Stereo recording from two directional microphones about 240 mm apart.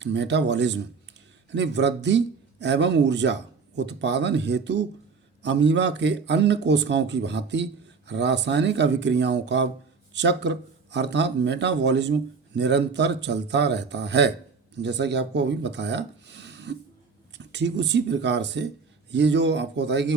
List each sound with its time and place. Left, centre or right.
0.0 s speech: right